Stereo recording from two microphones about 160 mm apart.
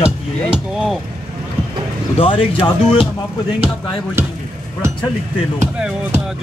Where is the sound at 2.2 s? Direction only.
35° left (ahead or behind).